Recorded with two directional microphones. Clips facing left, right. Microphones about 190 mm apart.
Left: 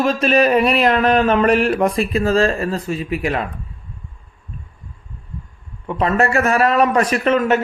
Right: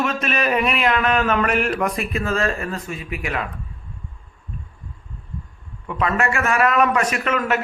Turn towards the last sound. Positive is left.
turn(degrees=25)  # may be behind; listen again after turning